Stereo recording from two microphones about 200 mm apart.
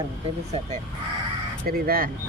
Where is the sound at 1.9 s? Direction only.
45° right (ahead or behind).